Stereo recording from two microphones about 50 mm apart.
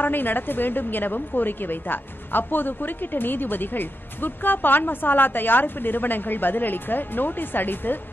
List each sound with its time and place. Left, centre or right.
0.0 s a woman's voice: left